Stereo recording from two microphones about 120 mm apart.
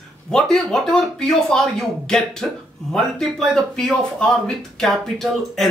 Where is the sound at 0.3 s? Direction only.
5° left (ahead or behind).